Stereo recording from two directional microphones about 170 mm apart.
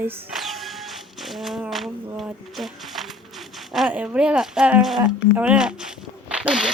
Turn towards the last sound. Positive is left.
turn(degrees=-5)  # may be behind; listen again after turning